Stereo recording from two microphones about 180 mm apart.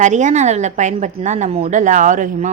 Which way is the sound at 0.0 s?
40° right (ahead or behind).